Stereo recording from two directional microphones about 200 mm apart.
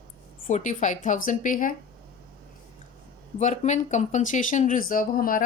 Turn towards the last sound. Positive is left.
turn(degrees=45)  # may be behind; listen again after turning